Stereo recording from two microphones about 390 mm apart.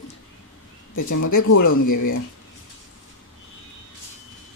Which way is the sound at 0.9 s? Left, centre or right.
Left.